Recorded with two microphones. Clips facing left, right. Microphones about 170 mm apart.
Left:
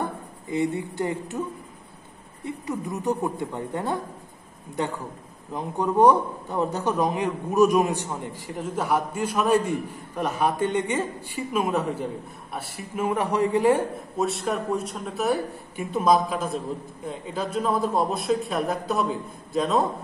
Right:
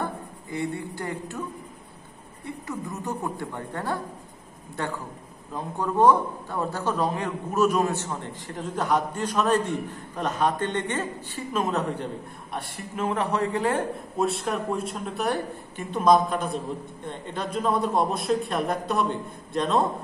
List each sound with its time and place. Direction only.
0.5 s a woman's voice: 20° left (ahead or behind)
2.4 s a woman's voice: 20° left (ahead or behind)
5.5 s a man's voice: 20° left (ahead or behind)
14.1 s speech: centre (ahead or behind)